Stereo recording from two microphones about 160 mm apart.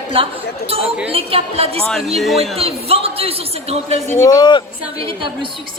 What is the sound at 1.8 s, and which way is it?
Speech, 5° left (ahead or behind).